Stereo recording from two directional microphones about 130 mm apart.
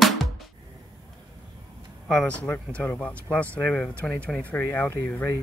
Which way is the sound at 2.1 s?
5° left (ahead or behind).